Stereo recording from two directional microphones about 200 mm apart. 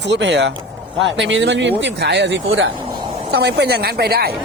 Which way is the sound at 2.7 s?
25° right (ahead or behind).